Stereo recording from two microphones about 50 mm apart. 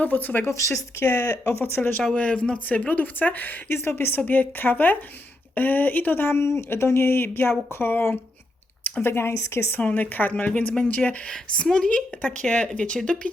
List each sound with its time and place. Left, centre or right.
0.0 s speech: left
0.5 s speech: left
1.0 s speech: left
1.8 s speech: left
2.1 s speech: left
2.6 s speech: left
3.8 s speech: left
6.4 s speech: left
9.8 s speech: left
11.3 s a woman's voice: centre